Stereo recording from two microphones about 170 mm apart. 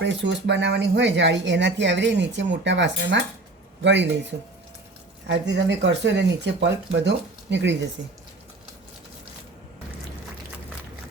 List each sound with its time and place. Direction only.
0.0 s speech: 90° right